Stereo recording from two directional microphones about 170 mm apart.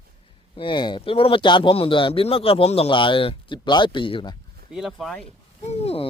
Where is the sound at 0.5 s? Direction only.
30° left (ahead or behind).